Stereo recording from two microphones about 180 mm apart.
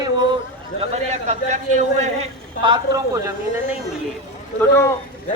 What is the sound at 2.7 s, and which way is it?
Speech, 20° right (ahead or behind).